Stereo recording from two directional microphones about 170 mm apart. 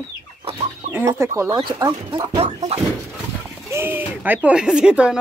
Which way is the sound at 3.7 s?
10° right (ahead or behind).